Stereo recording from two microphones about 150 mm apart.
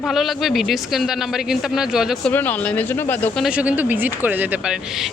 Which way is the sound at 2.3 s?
10° left (ahead or behind).